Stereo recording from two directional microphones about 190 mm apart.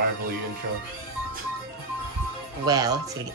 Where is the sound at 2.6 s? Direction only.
20° right (ahead or behind).